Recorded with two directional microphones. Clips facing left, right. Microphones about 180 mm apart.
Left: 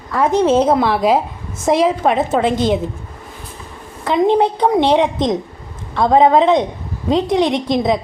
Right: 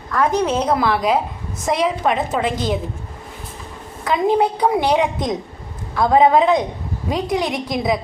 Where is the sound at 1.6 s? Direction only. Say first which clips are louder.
Left 5 dB; 25° left (ahead or behind).